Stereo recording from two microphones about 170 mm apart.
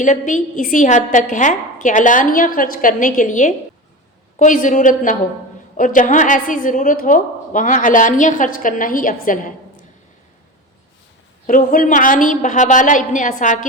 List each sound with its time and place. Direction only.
0.0 s a woman's voice: 45° left (ahead or behind)
11.4 s a woman's voice: 50° left (ahead or behind)